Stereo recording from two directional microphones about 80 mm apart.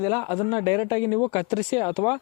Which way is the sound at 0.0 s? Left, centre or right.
Left.